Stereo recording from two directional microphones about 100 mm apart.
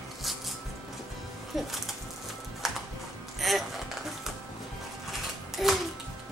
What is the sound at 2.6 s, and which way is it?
Music, centre (ahead or behind).